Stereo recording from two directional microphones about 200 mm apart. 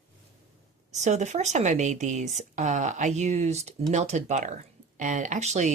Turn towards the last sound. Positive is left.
turn(degrees=-35)  # may be behind; listen again after turning